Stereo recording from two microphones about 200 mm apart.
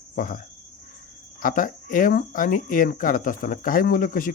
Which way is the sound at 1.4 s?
45° left (ahead or behind).